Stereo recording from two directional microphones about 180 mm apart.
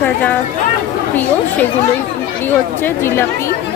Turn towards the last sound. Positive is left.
turn(degrees=15)  # may be behind; listen again after turning